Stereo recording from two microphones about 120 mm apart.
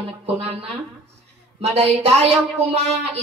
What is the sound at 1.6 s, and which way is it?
Speech, 65° right (ahead or behind).